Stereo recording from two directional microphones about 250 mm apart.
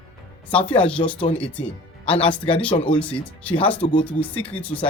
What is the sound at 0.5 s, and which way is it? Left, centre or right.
Speech, left.